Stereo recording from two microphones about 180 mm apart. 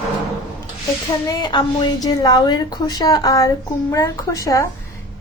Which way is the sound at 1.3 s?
25° left (ahead or behind).